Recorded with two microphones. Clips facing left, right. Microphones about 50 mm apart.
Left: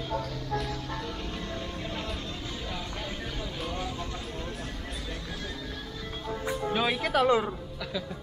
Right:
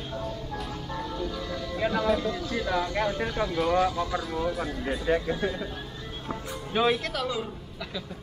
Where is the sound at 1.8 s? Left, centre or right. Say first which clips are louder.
Right 11 dB; right.